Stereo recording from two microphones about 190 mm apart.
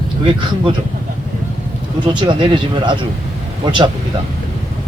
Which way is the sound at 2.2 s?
25° right (ahead or behind).